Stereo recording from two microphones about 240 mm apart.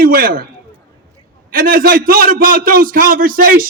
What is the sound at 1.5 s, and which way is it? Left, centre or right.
A man's voice, right.